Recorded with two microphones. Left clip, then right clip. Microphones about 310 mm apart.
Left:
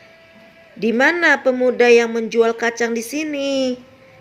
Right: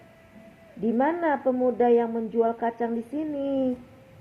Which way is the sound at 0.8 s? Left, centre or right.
Left.